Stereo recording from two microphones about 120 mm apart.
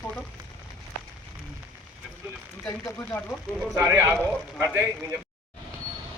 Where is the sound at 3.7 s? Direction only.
25° right (ahead or behind).